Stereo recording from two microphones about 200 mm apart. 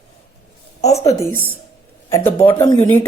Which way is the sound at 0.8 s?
35° left (ahead or behind).